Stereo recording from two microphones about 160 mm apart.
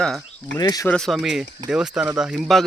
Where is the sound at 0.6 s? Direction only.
25° left (ahead or behind).